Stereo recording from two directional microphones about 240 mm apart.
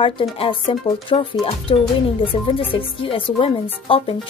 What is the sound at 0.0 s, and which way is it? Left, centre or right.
Speech, left.